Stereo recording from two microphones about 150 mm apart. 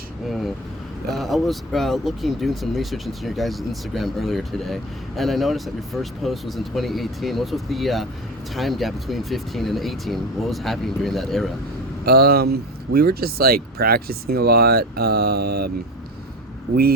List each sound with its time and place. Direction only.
0.3 s speech: centre (ahead or behind)
12.0 s speech: 90° right